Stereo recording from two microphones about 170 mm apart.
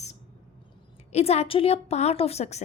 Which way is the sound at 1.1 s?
40° left (ahead or behind).